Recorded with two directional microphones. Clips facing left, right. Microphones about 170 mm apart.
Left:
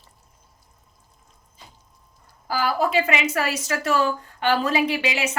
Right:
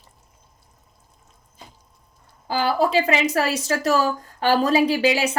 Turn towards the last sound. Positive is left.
turn(degrees=-35)  # may be behind; listen again after turning